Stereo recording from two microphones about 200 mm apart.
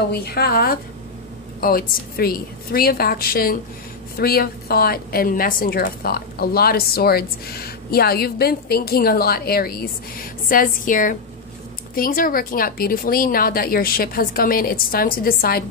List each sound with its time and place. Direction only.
0.1 s a woman's voice: 50° left (ahead or behind)